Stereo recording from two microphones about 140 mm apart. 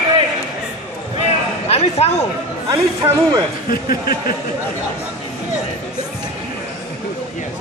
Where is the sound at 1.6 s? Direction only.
50° left (ahead or behind).